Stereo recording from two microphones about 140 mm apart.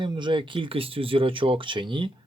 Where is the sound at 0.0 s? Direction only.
35° right (ahead or behind).